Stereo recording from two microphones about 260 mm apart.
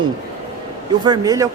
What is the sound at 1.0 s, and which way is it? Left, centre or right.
Speech, centre.